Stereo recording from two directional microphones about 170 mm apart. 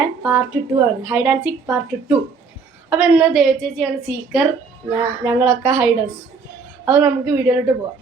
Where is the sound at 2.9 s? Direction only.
5° right (ahead or behind).